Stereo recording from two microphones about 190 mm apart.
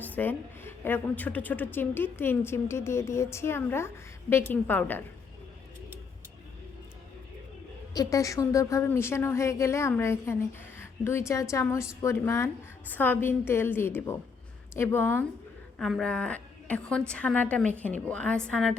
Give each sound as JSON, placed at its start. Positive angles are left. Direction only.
{"t": 0.0, "sound": "a woman's voice", "side_deg": 10}
{"t": 7.9, "sound": "a woman's voice", "side_deg": 15}
{"t": 15.8, "sound": "a woman's voice", "side_deg": 0}